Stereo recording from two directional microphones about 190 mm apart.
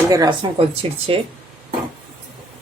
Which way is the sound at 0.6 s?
30° right (ahead or behind).